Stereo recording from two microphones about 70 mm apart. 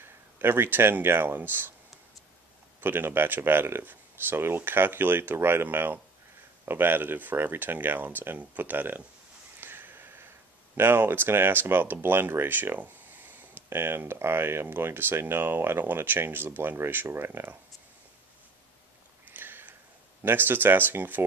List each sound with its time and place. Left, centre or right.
0.0 s speech: right
2.8 s speech: right
9.6 s sniff: right
10.8 s speech: right
19.2 s a sound: right
20.2 s speech: right